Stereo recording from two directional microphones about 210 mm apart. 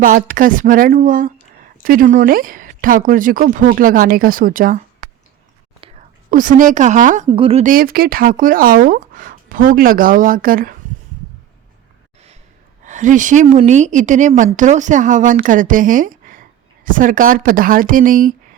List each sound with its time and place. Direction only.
0.0 s speech: 40° right (ahead or behind)
5.8 s whispering: 25° right (ahead or behind)
6.3 s speech: 40° right (ahead or behind)
7.3 s speech: 25° right (ahead or behind)
7.7 s speech: 45° right (ahead or behind)
12.8 s speech: 35° right (ahead or behind)